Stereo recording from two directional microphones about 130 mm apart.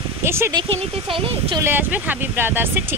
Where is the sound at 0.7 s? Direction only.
45° right (ahead or behind).